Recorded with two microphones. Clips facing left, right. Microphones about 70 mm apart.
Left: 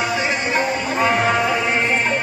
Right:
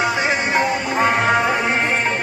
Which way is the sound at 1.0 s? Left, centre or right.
Right.